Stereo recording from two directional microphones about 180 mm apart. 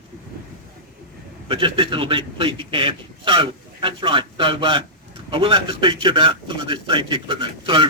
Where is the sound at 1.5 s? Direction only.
30° right (ahead or behind).